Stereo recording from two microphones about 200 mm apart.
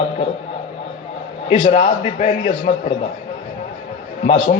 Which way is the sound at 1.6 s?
40° left (ahead or behind).